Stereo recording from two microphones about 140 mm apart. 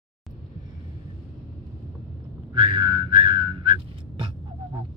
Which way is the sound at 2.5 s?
35° right (ahead or behind).